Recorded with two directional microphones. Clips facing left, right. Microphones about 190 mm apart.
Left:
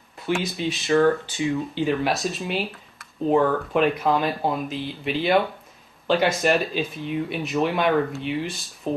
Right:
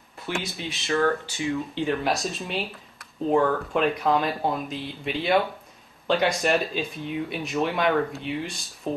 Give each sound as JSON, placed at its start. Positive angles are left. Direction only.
{"t": 0.4, "sound": "speech", "side_deg": 20}
{"t": 1.8, "sound": "speech", "side_deg": 0}